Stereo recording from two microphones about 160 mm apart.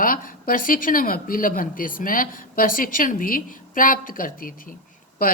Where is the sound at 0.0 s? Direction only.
60° left (ahead or behind).